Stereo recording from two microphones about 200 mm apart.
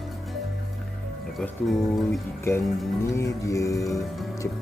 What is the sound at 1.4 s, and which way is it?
Speech, centre (ahead or behind).